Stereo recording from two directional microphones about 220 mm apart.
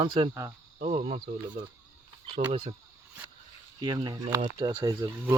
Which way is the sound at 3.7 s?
20° right (ahead or behind).